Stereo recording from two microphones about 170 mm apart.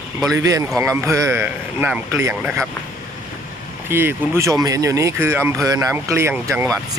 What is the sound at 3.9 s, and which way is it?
Speech, 15° right (ahead or behind).